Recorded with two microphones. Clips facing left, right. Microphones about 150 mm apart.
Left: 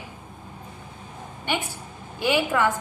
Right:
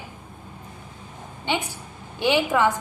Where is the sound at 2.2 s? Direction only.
20° right (ahead or behind).